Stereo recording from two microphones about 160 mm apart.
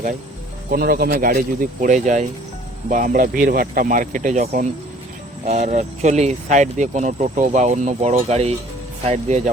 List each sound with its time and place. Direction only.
0.7 s speech: 70° right (ahead or behind); by 9.5 s 45° right (ahead or behind)